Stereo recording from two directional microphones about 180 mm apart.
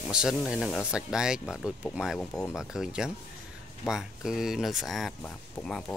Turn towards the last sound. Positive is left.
turn(degrees=5)  # may be behind; listen again after turning